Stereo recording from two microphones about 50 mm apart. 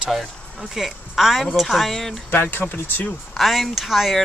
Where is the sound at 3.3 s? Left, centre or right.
Centre.